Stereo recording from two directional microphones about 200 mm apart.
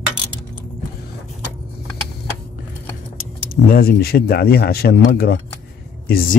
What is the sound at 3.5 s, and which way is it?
Speech, 50° left (ahead or behind).